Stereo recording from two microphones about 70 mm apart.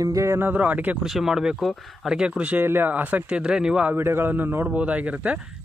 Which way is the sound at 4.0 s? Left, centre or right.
Right.